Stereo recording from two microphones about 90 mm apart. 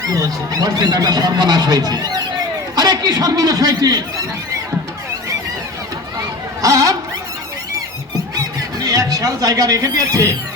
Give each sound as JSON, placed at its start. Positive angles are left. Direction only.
{"t": 0.0, "sound": "speech", "side_deg": -40}
{"t": 6.6, "sound": "a sound", "side_deg": -40}
{"t": 8.8, "sound": "speech", "side_deg": -40}